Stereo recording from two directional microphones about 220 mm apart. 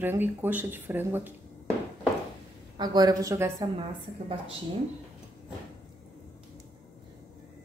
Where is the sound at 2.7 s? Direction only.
20° right (ahead or behind).